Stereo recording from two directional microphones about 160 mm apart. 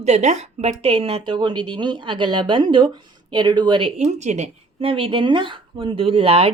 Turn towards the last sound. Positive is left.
turn(degrees=-35)  # may be behind; listen again after turning